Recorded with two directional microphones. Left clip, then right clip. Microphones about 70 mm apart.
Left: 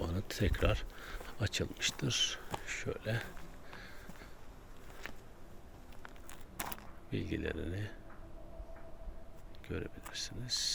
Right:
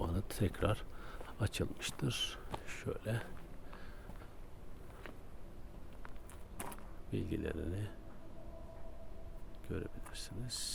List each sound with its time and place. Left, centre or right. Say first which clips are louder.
0.0 s a sound: left 2 dB; right
1.4 s speech: left 4 dB; right
2.6 s speech: left 5 dB; right
2.9 s speech: even; right
7.1 s speech: left 2 dB; right
9.6 s speech: left 2 dB; right